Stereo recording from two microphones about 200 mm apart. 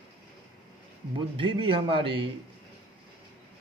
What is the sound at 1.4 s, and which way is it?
Speech, 25° right (ahead or behind).